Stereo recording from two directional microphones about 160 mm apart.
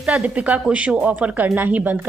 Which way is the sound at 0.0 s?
5° right (ahead or behind).